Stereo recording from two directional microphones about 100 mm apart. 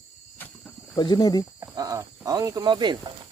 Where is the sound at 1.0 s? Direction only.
45° left (ahead or behind).